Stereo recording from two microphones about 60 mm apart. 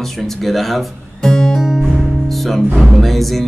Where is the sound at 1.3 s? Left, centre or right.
Centre.